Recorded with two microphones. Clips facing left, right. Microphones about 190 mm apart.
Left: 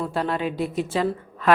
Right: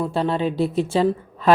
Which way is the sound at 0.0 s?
25° right (ahead or behind).